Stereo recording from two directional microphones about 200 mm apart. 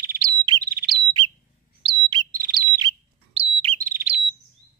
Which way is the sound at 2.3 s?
45° right (ahead or behind).